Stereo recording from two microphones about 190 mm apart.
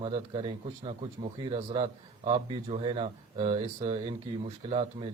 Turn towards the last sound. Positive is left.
turn(degrees=-25)  # may be behind; listen again after turning